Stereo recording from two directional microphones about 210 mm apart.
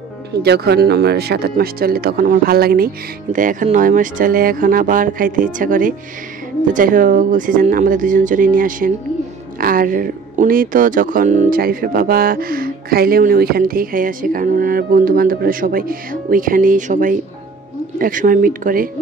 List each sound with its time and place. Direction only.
0.4 s speech: 50° right (ahead or behind)